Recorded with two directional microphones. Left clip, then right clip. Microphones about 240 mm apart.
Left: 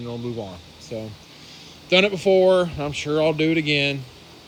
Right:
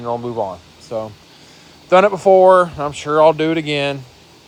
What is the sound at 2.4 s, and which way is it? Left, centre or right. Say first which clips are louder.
Speech: right 7 dB; centre.